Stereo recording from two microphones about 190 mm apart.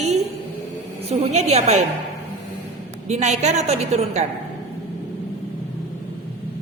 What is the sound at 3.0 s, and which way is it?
A woman's voice, 35° right (ahead or behind).